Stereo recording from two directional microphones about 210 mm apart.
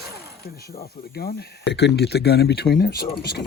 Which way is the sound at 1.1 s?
50° left (ahead or behind).